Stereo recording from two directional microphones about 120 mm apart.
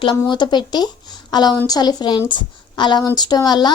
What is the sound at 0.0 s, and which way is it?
Speech, 40° left (ahead or behind).